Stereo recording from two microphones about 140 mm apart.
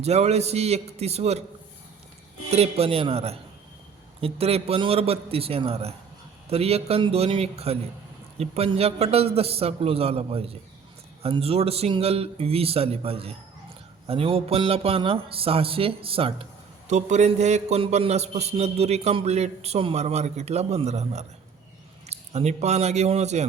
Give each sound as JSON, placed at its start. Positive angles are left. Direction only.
{"t": 0.0, "sound": "a man's voice", "side_deg": -50}
{"t": 2.5, "sound": "a man's voice", "side_deg": -45}
{"t": 16.9, "sound": "a man's voice", "side_deg": -55}